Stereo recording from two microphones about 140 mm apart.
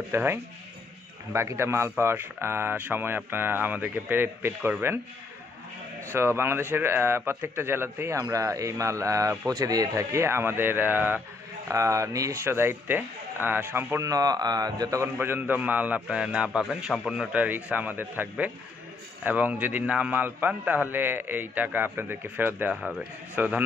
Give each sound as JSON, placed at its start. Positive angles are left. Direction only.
{"t": 0.1, "sound": "speech", "side_deg": -15}
{"t": 6.1, "sound": "speech", "side_deg": -15}